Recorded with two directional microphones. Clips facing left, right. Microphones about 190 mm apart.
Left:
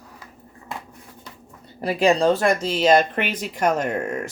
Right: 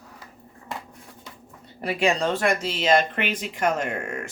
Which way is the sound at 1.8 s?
35° left (ahead or behind).